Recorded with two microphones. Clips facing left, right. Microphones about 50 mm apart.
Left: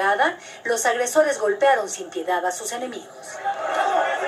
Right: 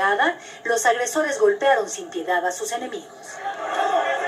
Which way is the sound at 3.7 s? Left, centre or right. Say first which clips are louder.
Even; right.